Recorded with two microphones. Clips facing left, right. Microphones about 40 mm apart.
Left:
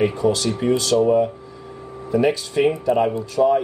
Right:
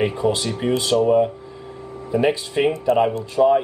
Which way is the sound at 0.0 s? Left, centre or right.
Right.